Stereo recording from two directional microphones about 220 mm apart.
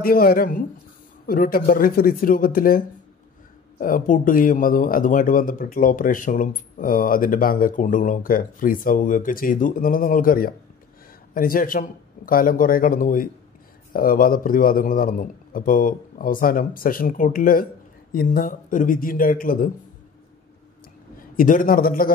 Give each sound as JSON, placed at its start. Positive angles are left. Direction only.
{"t": 0.0, "sound": "a man's voice", "side_deg": 40}
{"t": 3.8, "sound": "a man's voice", "side_deg": 40}
{"t": 21.2, "sound": "a man's voice", "side_deg": 40}